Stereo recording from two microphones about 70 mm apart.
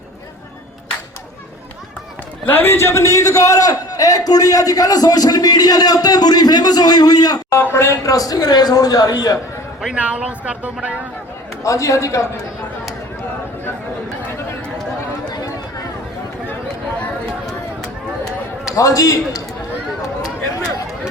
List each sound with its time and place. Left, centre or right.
2.5 s a man's voice: left
7.5 s a man's voice: left
8.0 s a man's voice: left
10.0 s speech: centre
11.6 s a man's voice: left
18.8 s a man's voice: left